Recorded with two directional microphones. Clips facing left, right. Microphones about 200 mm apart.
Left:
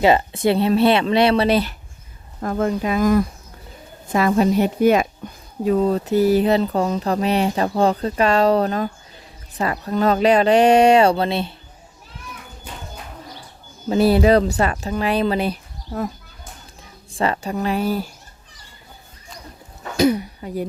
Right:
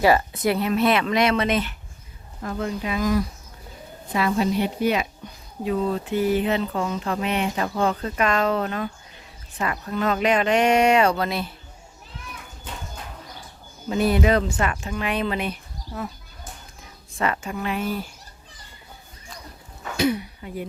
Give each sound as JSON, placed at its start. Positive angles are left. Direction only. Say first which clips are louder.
{"t": 0.0, "sound": "a woman's voice", "louder": "left 3 dB", "side_deg": 25}
{"t": 2.4, "sound": "a woman's voice", "louder": "left 7 dB", "side_deg": 50}
{"t": 13.9, "sound": "a woman's voice", "louder": "left 6 dB", "side_deg": 35}
{"t": 17.1, "sound": "a woman's voice", "louder": "left 4 dB", "side_deg": 30}
{"t": 20.0, "sound": "speech", "louder": "left 5 dB", "side_deg": 40}